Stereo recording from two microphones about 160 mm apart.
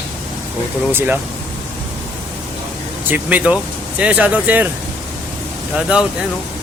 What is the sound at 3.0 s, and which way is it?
Speech, 10° right (ahead or behind).